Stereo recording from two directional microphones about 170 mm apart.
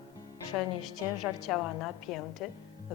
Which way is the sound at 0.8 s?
Centre (ahead or behind).